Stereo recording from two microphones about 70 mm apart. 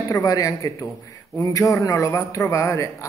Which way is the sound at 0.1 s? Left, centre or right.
Left.